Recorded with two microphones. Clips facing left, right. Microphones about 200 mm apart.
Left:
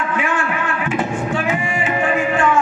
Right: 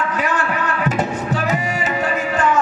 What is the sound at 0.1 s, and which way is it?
Music, 40° right (ahead or behind).